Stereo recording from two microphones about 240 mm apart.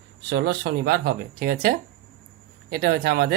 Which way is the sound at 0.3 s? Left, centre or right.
Right.